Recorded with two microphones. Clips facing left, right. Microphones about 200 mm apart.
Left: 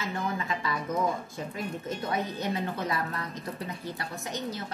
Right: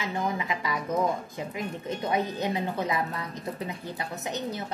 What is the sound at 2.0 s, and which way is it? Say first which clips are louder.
A woman's voice: right 4 dB; 15° right (ahead or behind).